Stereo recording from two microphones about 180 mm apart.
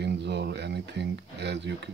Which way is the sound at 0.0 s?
70° right (ahead or behind).